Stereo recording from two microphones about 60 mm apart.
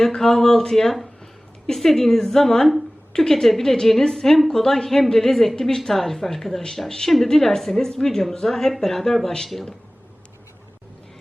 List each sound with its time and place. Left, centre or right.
0.0 s a woman's voice: centre